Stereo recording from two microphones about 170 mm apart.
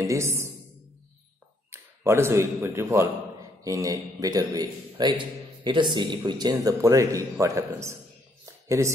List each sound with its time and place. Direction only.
0.0 s a woman's voice: 15° right (ahead or behind)
1.7 s a man's voice: 15° right (ahead or behind)
8.5 s a sound: 15° right (ahead or behind)